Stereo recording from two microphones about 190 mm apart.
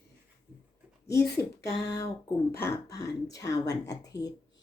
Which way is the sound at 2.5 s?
10° left (ahead or behind).